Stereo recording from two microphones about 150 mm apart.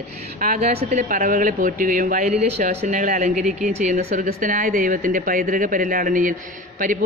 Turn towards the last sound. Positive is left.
turn(degrees=-65)  # may be behind; listen again after turning